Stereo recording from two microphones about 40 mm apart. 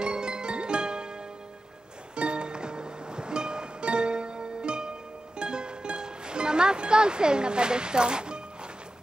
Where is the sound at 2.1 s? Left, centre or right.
Right.